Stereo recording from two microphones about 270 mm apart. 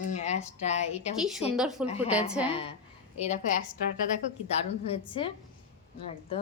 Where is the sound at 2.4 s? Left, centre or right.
Centre.